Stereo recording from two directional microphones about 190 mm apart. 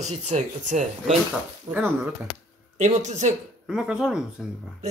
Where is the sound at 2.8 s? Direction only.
40° right (ahead or behind).